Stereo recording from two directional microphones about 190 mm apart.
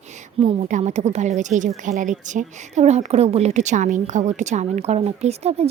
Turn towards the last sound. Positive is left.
turn(degrees=-35)  # may be behind; listen again after turning